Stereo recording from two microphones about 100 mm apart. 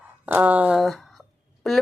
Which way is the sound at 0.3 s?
15° right (ahead or behind).